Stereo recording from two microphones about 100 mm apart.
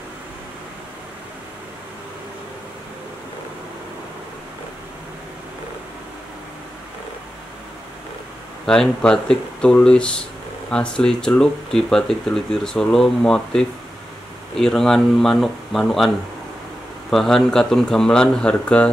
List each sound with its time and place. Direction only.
8.6 s speech: 5° left (ahead or behind)
17.1 s speech: 5° left (ahead or behind)